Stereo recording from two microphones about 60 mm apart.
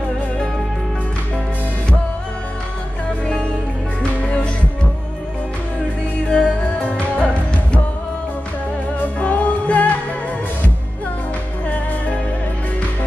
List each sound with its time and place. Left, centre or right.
6.2 s music: centre
9.2 s music: left